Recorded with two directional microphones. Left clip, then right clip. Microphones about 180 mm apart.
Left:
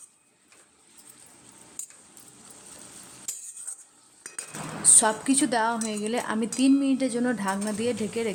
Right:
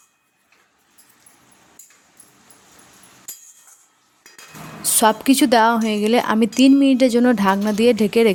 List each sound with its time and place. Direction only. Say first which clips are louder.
4.8 s speech: right 7 dB; 40° right (ahead or behind)